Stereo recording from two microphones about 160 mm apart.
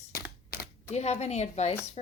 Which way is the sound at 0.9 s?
45° left (ahead or behind).